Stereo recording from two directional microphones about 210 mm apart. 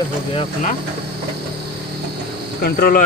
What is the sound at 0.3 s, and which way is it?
Speech, 25° left (ahead or behind).